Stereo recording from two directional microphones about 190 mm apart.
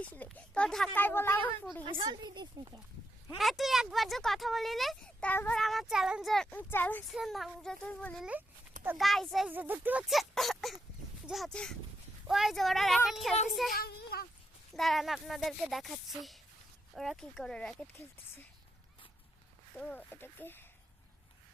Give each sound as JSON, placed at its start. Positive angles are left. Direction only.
{"t": 0.0, "sound": "speech", "side_deg": 10}
{"t": 1.8, "sound": "a woman's voice", "side_deg": -25}
{"t": 3.3, "sound": "speech", "side_deg": 0}
{"t": 7.1, "sound": "speech", "side_deg": 0}
{"t": 13.7, "sound": "speech", "side_deg": 55}
{"t": 14.7, "sound": "speech", "side_deg": 0}
{"t": 19.7, "sound": "speech", "side_deg": 10}